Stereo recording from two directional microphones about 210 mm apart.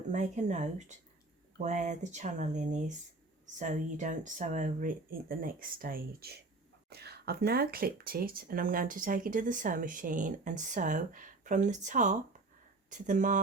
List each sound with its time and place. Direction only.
0.1 s speech: 35° right (ahead or behind)